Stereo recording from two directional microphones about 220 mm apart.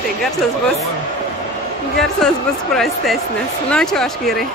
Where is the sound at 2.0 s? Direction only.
Centre (ahead or behind).